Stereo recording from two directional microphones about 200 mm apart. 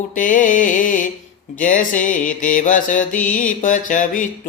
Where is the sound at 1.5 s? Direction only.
40° left (ahead or behind).